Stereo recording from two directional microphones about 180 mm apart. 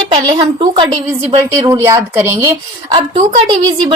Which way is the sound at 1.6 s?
20° right (ahead or behind).